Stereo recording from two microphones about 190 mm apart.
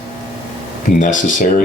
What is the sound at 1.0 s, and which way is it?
Speech, 45° left (ahead or behind).